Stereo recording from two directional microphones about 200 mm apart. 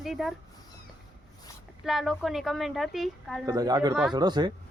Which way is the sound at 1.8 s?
Centre (ahead or behind).